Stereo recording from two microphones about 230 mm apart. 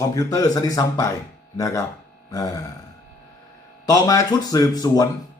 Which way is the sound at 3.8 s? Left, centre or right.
Centre.